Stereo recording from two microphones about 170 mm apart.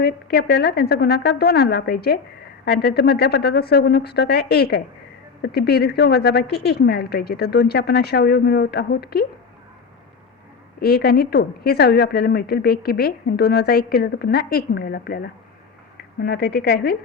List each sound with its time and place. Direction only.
0.0 s a woman's voice: 70° left (ahead or behind)
10.8 s a woman's voice: 65° left (ahead or behind)